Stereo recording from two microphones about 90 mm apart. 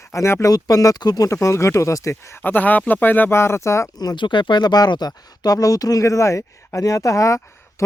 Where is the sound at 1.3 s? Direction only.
35° left (ahead or behind).